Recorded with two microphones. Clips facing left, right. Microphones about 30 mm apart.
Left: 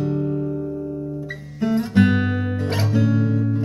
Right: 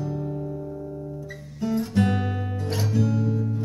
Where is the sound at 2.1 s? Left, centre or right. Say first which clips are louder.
Left 6 dB; centre.